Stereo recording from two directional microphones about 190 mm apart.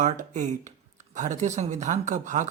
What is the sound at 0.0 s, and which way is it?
Speech, 40° right (ahead or behind).